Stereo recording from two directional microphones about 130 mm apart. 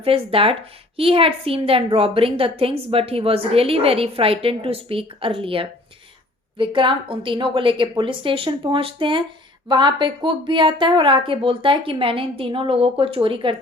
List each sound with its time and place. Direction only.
0.0 s a woman's voice: 45° right (ahead or behind)